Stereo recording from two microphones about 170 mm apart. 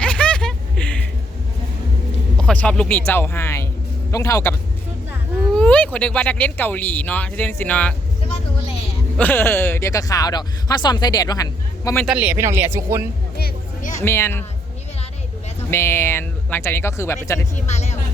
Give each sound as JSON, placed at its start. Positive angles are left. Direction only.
{"t": 0.0, "sound": "a sound", "side_deg": 5}
{"t": 2.4, "sound": "a sound", "side_deg": 5}
{"t": 3.1, "sound": "speech", "side_deg": 15}
{"t": 5.5, "sound": "speech", "side_deg": 5}
{"t": 9.1, "sound": "speech", "side_deg": 10}
{"t": 12.0, "sound": "speech", "side_deg": -10}
{"t": 14.0, "sound": "speech", "side_deg": 15}
{"t": 15.7, "sound": "speech", "side_deg": 15}
{"t": 17.5, "sound": "speech", "side_deg": 40}